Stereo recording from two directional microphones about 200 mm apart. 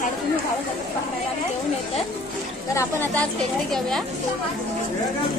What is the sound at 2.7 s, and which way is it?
Speech, 5° left (ahead or behind).